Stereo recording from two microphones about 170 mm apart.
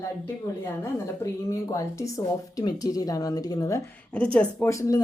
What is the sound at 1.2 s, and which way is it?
Speech, 20° left (ahead or behind).